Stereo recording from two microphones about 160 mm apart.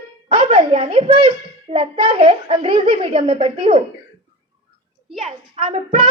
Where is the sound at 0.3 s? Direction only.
40° right (ahead or behind).